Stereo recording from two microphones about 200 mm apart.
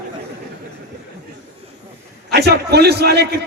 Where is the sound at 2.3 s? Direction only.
55° right (ahead or behind).